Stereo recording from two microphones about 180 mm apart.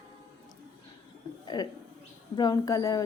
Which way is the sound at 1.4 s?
25° left (ahead or behind).